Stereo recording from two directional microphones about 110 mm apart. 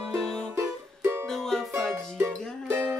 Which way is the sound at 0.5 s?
25° right (ahead or behind).